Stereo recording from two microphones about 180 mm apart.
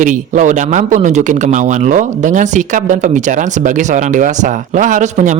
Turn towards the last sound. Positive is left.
turn(degrees=-45)  # may be behind; listen again after turning